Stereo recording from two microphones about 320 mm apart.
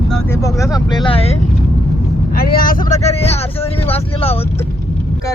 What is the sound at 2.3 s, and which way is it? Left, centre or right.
Speech, left.